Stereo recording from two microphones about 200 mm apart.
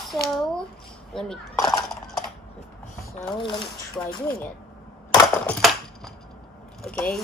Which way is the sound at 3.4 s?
25° left (ahead or behind).